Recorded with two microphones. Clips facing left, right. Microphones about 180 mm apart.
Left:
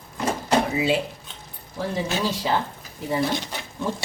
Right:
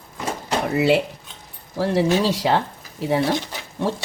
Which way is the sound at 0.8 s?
70° right (ahead or behind).